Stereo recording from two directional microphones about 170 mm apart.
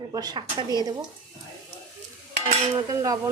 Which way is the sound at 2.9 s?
20° right (ahead or behind).